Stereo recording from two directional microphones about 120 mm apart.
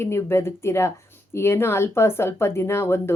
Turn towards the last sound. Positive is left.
turn(degrees=20)  # may be behind; listen again after turning